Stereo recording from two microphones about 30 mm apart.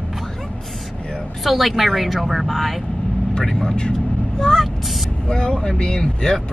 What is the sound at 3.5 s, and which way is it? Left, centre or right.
Speech, left.